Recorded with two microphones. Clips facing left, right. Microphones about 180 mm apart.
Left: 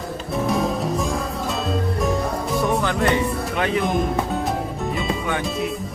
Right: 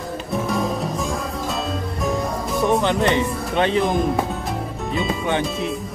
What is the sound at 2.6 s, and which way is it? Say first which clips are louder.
Speech: right 4 dB; 20° right (ahead or behind).